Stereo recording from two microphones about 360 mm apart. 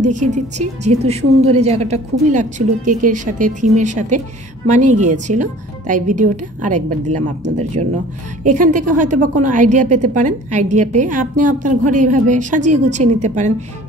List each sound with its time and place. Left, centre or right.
0.0 s a woman's voice: centre